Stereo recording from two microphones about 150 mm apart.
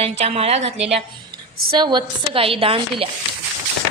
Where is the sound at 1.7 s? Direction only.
30° right (ahead or behind).